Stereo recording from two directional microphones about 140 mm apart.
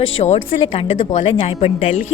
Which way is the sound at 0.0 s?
45° left (ahead or behind).